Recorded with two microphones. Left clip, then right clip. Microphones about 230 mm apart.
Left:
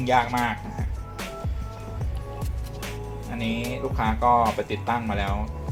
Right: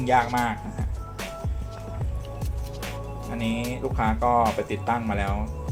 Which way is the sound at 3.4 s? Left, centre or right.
Centre.